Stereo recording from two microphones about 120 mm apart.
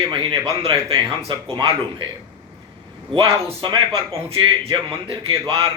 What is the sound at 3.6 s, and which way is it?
Speech, 40° right (ahead or behind).